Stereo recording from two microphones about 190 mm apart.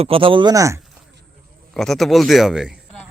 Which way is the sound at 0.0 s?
30° right (ahead or behind).